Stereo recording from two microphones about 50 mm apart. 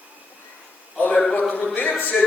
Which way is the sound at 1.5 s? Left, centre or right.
Left.